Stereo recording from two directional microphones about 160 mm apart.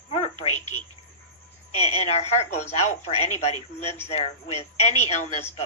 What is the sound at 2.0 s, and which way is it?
A woman's voice, 45° left (ahead or behind).